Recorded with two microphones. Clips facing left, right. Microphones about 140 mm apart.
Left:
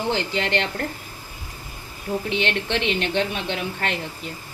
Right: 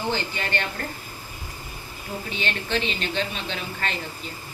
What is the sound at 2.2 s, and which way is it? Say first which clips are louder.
A woman's voice: left 4 dB; 70° left (ahead or behind).